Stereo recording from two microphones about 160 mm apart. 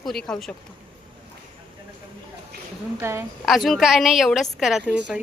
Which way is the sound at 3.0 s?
15° right (ahead or behind).